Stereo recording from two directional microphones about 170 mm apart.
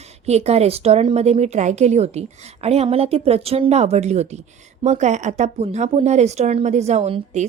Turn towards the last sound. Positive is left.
turn(degrees=-40)  # may be behind; listen again after turning